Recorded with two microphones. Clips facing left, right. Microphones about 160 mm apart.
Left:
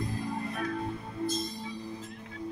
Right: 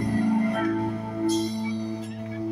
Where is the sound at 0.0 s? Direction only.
70° right (ahead or behind).